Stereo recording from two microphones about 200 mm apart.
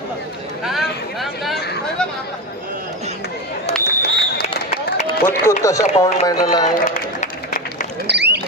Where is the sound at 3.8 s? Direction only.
55° left (ahead or behind).